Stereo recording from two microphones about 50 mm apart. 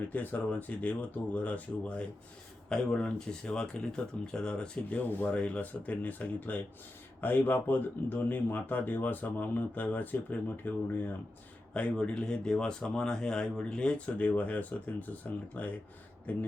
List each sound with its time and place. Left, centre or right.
0.1 s speech: left
2.6 s speech: centre
4.9 s speech: left
5.4 s speech: left
11.7 s speech: left